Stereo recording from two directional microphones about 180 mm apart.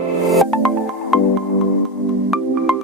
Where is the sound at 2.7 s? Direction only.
Centre (ahead or behind).